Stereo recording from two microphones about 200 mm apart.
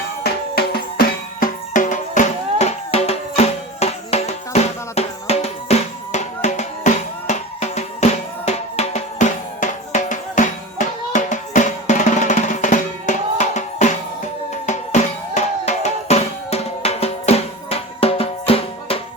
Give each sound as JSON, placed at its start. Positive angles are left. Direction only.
{"t": 0.2, "sound": "music", "side_deg": 55}